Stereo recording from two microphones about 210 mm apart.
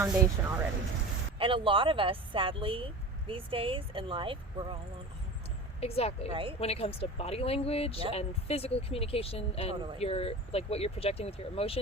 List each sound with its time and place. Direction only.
0.0 s speech: 10° right (ahead or behind)
1.4 s speech: 25° right (ahead or behind)
5.8 s speech: 30° left (ahead or behind)
6.3 s speech: 25° right (ahead or behind)
6.6 s speech: 30° left (ahead or behind)